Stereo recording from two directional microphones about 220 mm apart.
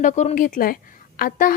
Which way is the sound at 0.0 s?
30° left (ahead or behind).